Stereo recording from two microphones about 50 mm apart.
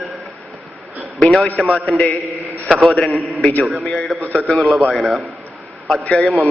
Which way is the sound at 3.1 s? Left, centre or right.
Centre.